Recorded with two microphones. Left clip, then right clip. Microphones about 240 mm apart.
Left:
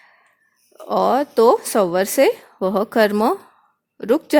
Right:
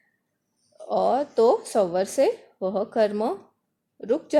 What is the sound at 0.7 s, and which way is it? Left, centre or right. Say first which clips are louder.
A woman's voice: left 5 dB; left.